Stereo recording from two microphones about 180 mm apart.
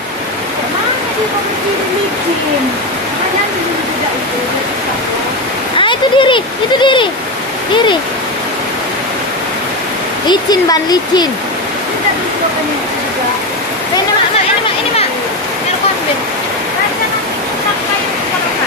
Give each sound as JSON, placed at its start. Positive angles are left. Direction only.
{"t": 5.8, "sound": "speech", "side_deg": 25}
{"t": 10.2, "sound": "speech", "side_deg": 25}